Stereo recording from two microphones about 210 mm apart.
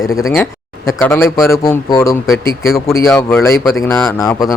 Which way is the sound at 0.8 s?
10° left (ahead or behind).